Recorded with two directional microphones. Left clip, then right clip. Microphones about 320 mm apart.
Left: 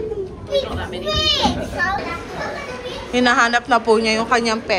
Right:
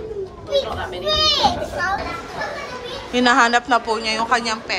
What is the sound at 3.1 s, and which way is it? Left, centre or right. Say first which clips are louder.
A woman's voice: even; centre.